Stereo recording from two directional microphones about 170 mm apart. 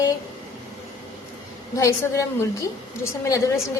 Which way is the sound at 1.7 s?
20° left (ahead or behind).